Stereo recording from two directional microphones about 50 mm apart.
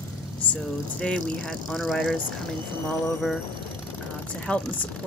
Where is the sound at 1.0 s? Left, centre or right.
Left.